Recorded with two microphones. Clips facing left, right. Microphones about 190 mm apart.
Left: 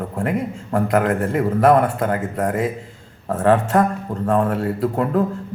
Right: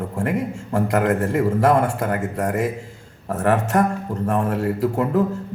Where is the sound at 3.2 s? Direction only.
20° right (ahead or behind).